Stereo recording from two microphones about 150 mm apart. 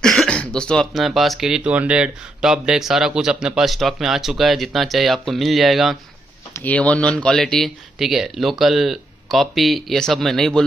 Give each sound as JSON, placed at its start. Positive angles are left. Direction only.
{"t": 0.0, "sound": "speech", "side_deg": 5}
{"t": 6.5, "sound": "speech", "side_deg": 10}